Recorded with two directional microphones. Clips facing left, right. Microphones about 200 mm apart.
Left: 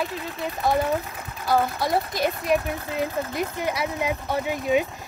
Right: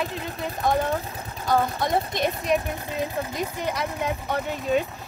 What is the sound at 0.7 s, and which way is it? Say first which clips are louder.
Speech: left 1 dB; 5° left (ahead or behind).